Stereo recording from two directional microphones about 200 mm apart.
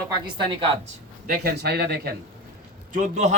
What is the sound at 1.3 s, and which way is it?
Speech, 55° right (ahead or behind).